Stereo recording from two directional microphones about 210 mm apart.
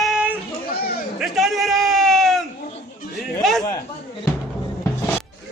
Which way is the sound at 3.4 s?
Centre (ahead or behind).